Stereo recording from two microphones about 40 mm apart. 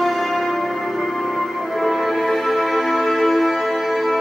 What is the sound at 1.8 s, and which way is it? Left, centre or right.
Music, centre.